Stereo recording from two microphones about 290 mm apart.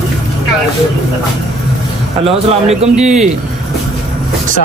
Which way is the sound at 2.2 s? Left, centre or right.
Right.